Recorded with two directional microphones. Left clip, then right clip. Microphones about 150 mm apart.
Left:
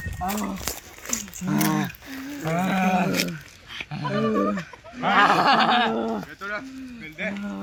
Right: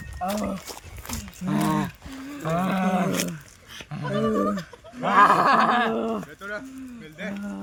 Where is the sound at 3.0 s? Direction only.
10° right (ahead or behind).